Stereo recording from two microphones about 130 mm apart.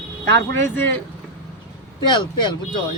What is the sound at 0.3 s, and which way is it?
Speech, 20° left (ahead or behind).